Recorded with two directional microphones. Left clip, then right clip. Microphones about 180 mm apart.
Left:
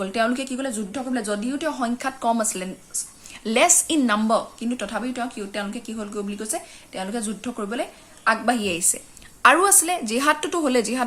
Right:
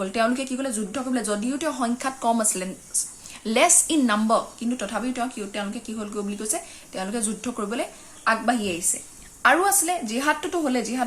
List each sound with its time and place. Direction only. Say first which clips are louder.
0.0 s a woman's voice: even; 10° left (ahead or behind); by 11.0 s 30° left (ahead or behind)